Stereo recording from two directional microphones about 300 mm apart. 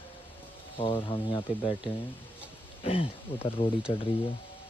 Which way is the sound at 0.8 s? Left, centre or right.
Centre.